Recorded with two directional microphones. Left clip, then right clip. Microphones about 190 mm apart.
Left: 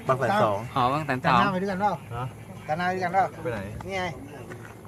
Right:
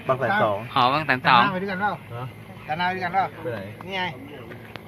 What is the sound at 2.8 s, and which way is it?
Speech, 55° left (ahead or behind).